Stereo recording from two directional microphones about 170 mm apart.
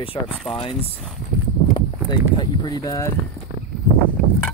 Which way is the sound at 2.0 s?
25° left (ahead or behind).